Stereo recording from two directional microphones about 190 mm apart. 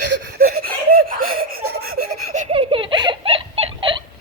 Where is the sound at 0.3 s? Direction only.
50° right (ahead or behind).